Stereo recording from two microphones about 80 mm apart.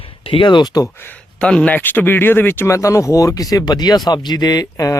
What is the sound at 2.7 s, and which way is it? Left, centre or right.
Speech, left.